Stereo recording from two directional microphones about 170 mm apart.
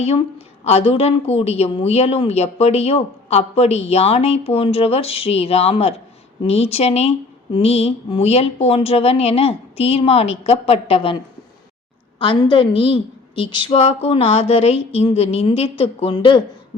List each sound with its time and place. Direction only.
0.0 s a woman's voice: 40° left (ahead or behind)
12.2 s a woman's voice: 30° left (ahead or behind)